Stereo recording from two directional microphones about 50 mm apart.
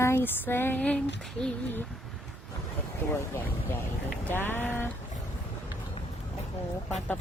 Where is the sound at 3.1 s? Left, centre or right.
Left.